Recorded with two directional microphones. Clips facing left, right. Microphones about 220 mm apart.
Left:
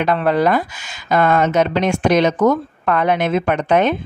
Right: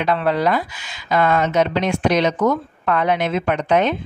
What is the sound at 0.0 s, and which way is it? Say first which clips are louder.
Speech: left 3 dB; 50° left (ahead or behind).